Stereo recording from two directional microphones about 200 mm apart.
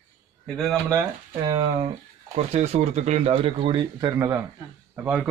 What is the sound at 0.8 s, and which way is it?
Speech, 20° right (ahead or behind).